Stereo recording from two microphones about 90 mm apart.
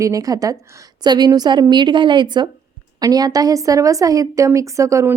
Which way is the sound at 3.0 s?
45° right (ahead or behind).